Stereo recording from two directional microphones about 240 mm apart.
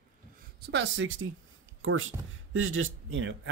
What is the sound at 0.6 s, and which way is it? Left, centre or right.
Speech, right.